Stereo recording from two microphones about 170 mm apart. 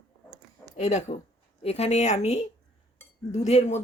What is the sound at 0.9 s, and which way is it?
Speech, 40° left (ahead or behind).